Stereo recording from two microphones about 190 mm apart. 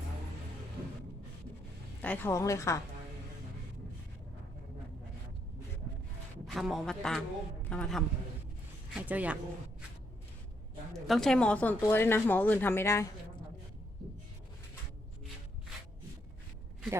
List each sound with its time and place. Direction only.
2.0 s speech: 10° left (ahead or behind)
6.5 s a man's voice: centre (ahead or behind)
8.9 s speech: 10° right (ahead or behind)
11.0 s speech: centre (ahead or behind)